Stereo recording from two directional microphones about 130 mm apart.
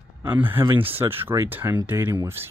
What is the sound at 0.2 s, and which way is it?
Speech, 15° right (ahead or behind).